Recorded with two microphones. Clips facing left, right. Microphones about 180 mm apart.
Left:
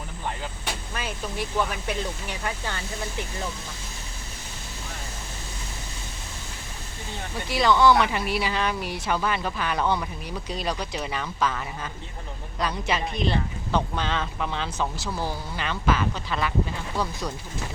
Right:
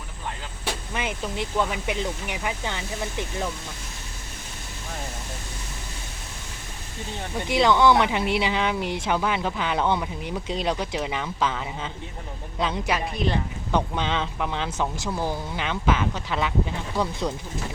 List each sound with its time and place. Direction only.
0.9 s speech: 20° right (ahead or behind)
7.4 s speech: 20° right (ahead or behind)